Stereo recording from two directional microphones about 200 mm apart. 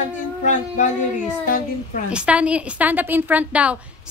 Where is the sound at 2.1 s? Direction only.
5° right (ahead or behind).